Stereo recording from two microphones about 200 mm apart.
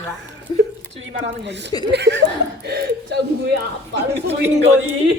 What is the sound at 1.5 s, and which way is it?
Speech, 60° right (ahead or behind).